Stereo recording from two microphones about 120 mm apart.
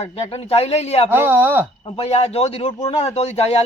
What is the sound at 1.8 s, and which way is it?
Speech, 55° left (ahead or behind).